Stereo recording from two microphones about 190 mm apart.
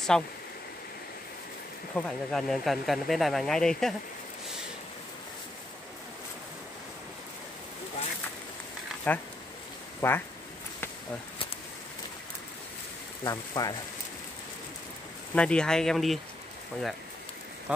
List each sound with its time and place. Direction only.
0.1 s speech: 5° left (ahead or behind)
2.0 s speech: centre (ahead or behind)
9.1 s speech: 10° left (ahead or behind)
13.2 s speech: 20° left (ahead or behind)
15.3 s speech: 5° left (ahead or behind)
17.7 s speech: 5° right (ahead or behind)